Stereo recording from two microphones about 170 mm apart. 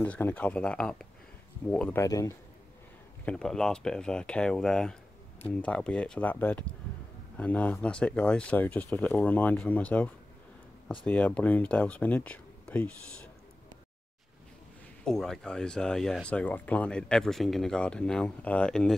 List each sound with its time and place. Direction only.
0.0 s speech: 10° left (ahead or behind)
2.0 s speech: 20° left (ahead or behind)
3.3 s speech: 5° left (ahead or behind)
15.0 s speech: 5° left (ahead or behind)